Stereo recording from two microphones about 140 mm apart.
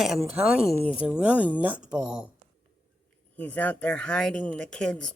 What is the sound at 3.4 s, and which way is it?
Speech, 10° left (ahead or behind).